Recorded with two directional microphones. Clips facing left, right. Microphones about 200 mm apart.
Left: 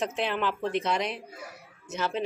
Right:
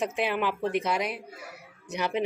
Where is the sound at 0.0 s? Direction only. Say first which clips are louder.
Right 1 dB; 10° right (ahead or behind).